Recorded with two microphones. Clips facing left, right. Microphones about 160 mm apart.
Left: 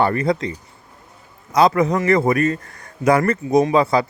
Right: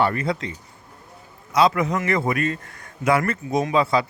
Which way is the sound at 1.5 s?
40° left (ahead or behind).